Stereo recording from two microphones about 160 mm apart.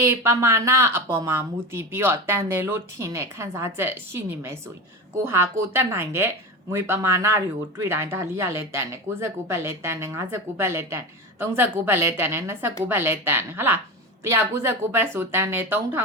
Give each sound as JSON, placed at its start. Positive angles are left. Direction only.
{"t": 0.0, "sound": "a woman's voice", "side_deg": -15}